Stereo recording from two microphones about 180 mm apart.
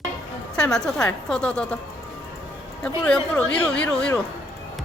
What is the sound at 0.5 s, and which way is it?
A woman's voice, centre (ahead or behind).